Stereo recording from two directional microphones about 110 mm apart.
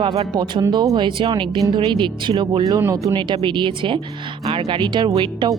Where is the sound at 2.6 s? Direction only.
30° right (ahead or behind).